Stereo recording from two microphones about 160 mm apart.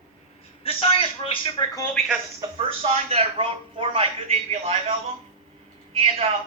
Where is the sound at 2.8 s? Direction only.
40° right (ahead or behind).